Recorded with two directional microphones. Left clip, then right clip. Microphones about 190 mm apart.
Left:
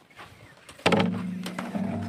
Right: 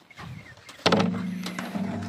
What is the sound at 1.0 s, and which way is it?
Music, 20° left (ahead or behind).